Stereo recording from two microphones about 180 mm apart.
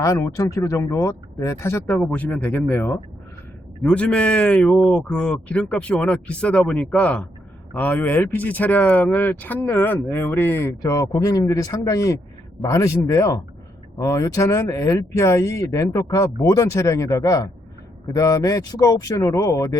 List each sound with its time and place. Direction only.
0.0 s speech: 15° left (ahead or behind)